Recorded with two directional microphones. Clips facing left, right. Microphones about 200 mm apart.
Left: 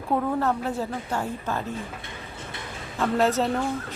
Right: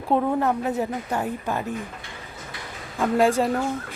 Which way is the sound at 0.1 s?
15° right (ahead or behind).